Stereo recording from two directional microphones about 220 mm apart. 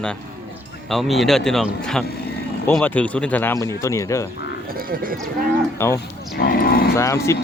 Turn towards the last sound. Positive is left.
turn(degrees=15)  # may be behind; listen again after turning